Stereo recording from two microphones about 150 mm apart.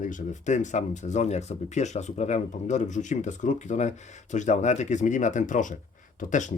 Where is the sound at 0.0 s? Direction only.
55° left (ahead or behind).